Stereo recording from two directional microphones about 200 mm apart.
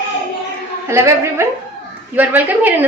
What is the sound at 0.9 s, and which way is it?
A woman's voice, 15° right (ahead or behind).